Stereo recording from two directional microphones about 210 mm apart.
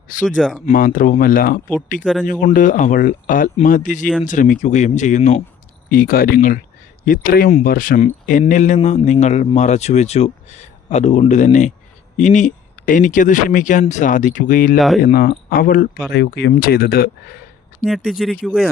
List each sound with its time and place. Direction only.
0.3 s speech: 5° right (ahead or behind)
0.6 s speech: 40° left (ahead or behind)
16.1 s speech: 55° left (ahead or behind)
17.8 s speech: centre (ahead or behind)